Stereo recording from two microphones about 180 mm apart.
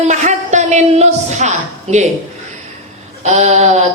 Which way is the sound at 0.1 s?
40° right (ahead or behind).